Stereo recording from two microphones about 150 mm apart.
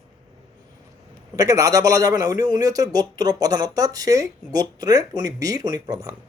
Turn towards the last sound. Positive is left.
turn(degrees=-25)  # may be behind; listen again after turning